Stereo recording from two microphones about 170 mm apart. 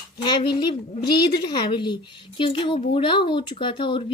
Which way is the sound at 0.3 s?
30° left (ahead or behind).